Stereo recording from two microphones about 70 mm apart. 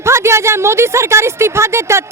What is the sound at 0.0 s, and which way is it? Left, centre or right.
A woman's voice, right.